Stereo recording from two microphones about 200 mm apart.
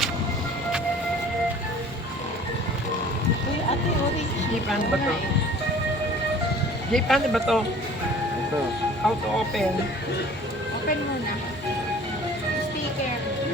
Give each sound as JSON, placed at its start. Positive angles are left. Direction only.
{"t": 6.9, "sound": "speech", "side_deg": 0}
{"t": 9.0, "sound": "speech", "side_deg": 0}